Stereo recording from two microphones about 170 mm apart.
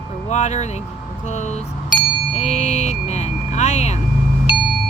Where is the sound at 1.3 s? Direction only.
45° left (ahead or behind).